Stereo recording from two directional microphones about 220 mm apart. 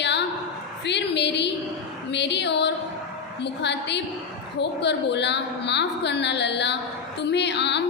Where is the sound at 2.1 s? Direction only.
50° left (ahead or behind).